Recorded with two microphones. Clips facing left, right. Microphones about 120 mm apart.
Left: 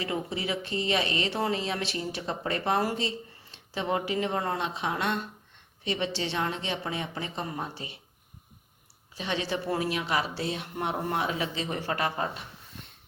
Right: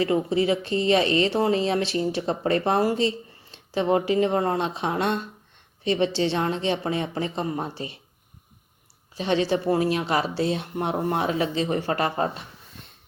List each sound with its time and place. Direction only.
0.0 s speech: 35° right (ahead or behind)
9.1 s speech: 30° right (ahead or behind)